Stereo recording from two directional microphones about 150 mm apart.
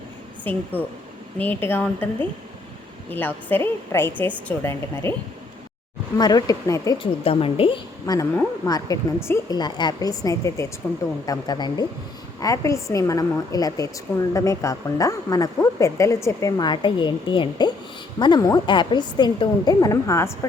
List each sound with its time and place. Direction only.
0.7 s a woman's voice: 10° left (ahead or behind)
3.1 s a woman's voice: 15° left (ahead or behind)
6.1 s a woman's voice: 25° left (ahead or behind)
7.0 s a woman's voice: 35° left (ahead or behind)
8.0 s a woman's voice: 25° left (ahead or behind)